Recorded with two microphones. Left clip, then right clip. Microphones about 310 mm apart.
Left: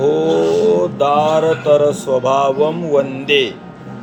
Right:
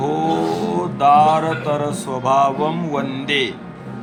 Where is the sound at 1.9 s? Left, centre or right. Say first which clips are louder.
Left 3 dB; centre.